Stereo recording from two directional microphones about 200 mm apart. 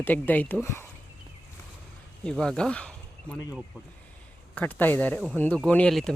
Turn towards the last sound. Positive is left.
turn(degrees=5)  # may be behind; listen again after turning